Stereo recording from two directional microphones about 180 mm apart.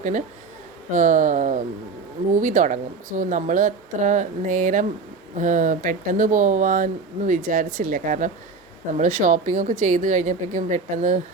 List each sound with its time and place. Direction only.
0.0 s speech: 45° right (ahead or behind)